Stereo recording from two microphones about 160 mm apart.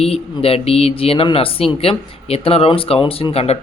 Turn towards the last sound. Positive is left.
turn(degrees=40)  # may be behind; listen again after turning